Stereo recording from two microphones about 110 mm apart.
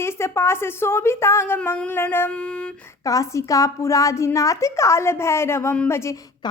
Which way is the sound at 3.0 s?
30° left (ahead or behind).